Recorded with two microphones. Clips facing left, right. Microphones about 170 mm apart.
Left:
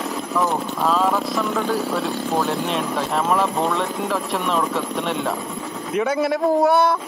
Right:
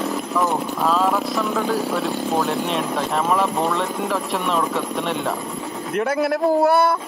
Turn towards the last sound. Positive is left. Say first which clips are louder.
# even
turn(degrees=0)  # may be behind; listen again after turning